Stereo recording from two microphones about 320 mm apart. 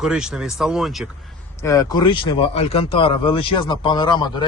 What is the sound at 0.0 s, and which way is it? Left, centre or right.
Speech, centre.